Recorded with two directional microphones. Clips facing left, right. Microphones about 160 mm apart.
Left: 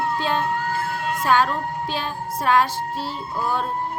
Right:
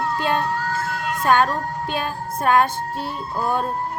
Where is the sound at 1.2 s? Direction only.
55° right (ahead or behind).